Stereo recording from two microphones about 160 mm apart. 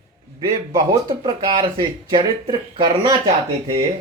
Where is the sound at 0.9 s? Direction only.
25° right (ahead or behind).